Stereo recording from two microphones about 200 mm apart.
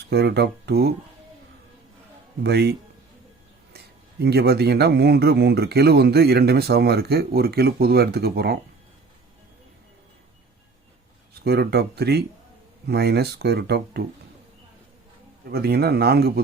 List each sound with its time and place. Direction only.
0.1 s speech: 55° right (ahead or behind)
2.4 s speech: 55° right (ahead or behind)
4.2 s speech: 55° right (ahead or behind)
11.4 s speech: 55° right (ahead or behind)
15.5 s speech: 50° right (ahead or behind)